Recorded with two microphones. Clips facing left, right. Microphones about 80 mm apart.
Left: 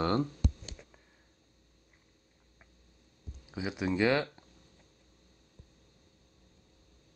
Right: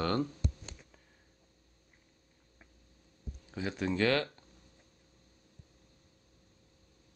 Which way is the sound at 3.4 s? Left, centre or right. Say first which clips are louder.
Left 1 dB; centre.